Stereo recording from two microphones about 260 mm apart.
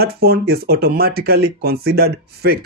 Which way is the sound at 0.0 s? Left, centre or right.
Right.